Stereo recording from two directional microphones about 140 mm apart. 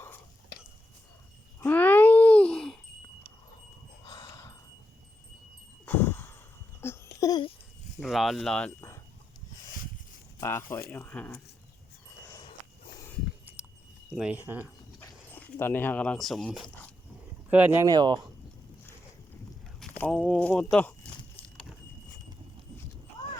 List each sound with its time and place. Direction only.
1.6 s babbling: 15° left (ahead or behind)
4.0 s a sound: 25° left (ahead or behind)
5.8 s a sound: 15° left (ahead or behind)
7.9 s speech: centre (ahead or behind)
10.4 s speech: 20° left (ahead or behind)
14.1 s speech: 10° right (ahead or behind)
14.6 s speech: 15° left (ahead or behind)
17.5 s speech: 15° right (ahead or behind)
17.8 s speech: 30° right (ahead or behind)
19.8 s a sound: 10° left (ahead or behind)
20.1 s speech: 5° left (ahead or behind)
21.4 s a sound: 5° left (ahead or behind)